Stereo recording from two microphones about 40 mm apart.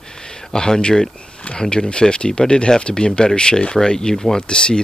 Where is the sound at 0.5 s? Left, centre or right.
Centre.